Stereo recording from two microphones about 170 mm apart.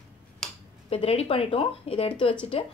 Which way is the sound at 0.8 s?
35° left (ahead or behind).